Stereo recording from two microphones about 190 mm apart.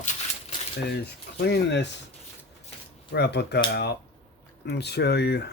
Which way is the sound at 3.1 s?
60° left (ahead or behind).